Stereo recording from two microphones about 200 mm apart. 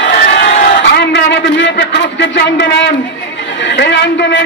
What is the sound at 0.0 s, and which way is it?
Crowd, 60° left (ahead or behind).